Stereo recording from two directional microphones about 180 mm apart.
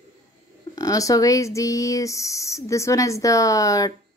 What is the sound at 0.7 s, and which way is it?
Speech, 20° left (ahead or behind).